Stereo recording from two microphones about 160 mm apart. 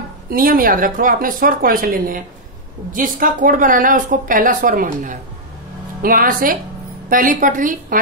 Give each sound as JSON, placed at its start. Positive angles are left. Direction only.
{"t": 0.3, "sound": "a woman's voice", "side_deg": -60}